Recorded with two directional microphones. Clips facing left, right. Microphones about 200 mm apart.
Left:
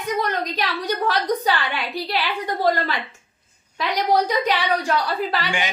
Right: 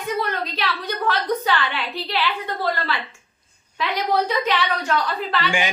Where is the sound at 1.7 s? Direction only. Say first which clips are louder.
Left 1 dB; 15° left (ahead or behind).